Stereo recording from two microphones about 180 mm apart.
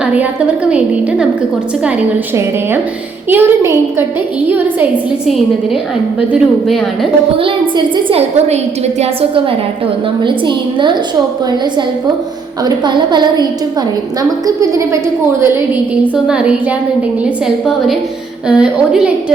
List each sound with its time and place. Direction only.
0.0 s a woman's voice: 5° right (ahead or behind)
1.8 s a woman's voice: 10° right (ahead or behind)
7.3 s a woman's voice: 30° right (ahead or behind)
12.6 s a woman's voice: 25° right (ahead or behind)
16.1 s a woman's voice: 5° right (ahead or behind)